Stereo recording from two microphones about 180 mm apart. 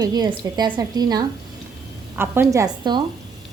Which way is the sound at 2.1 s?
10° right (ahead or behind).